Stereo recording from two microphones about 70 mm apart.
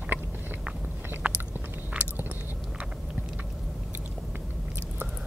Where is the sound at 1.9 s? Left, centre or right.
Centre.